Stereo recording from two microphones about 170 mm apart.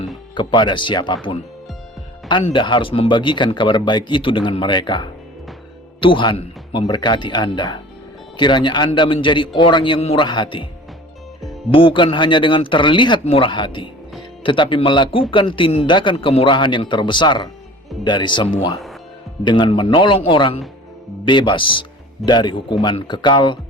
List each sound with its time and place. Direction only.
0.3 s speech: 25° left (ahead or behind)
11.7 s speech: 30° left (ahead or behind)